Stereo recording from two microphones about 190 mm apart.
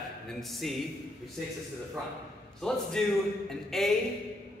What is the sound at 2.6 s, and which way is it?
A woman's voice, 5° left (ahead or behind).